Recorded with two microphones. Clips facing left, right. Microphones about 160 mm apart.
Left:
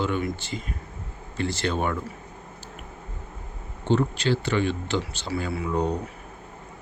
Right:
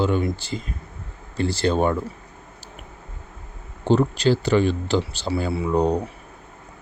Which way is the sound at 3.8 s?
35° right (ahead or behind).